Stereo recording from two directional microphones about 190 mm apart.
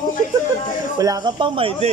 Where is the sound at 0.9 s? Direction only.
20° right (ahead or behind).